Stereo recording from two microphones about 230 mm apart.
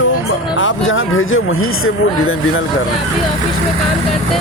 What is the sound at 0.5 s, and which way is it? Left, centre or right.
Speech, left.